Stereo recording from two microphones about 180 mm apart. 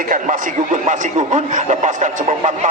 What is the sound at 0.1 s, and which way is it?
A man's voice, 45° right (ahead or behind).